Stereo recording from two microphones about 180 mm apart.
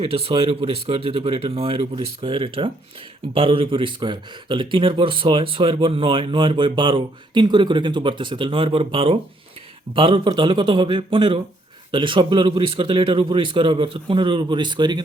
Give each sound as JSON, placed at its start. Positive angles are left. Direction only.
{"t": 0.0, "sound": "a man's voice", "side_deg": -30}